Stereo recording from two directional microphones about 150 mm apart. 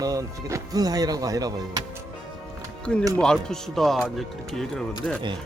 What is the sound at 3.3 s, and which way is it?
Speech, 5° left (ahead or behind).